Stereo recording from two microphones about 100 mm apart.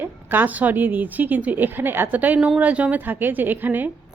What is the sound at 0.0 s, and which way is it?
A woman's voice, 20° right (ahead or behind).